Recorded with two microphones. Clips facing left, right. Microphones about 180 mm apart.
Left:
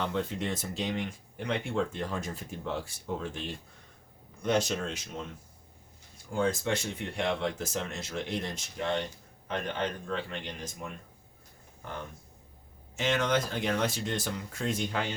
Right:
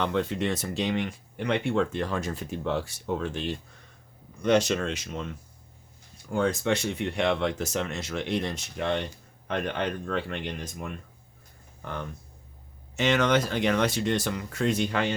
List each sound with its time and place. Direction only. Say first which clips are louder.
0.0 s speech: right 5 dB; 75° right (ahead or behind)
6.3 s speech: right 4 dB; 70° right (ahead or behind)
13.0 s speech: right 5 dB; 75° right (ahead or behind)